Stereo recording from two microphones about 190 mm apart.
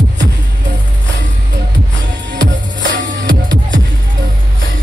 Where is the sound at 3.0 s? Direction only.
75° right (ahead or behind).